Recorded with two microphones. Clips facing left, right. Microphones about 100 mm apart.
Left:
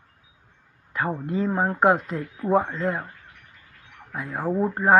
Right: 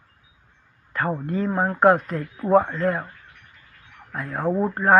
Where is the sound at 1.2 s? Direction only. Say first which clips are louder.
Left 1 dB; 15° left (ahead or behind).